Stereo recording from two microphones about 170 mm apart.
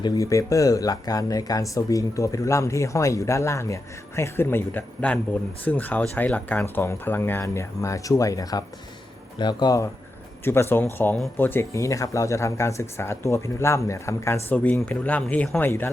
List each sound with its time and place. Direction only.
0.0 s speech: 20° left (ahead or behind)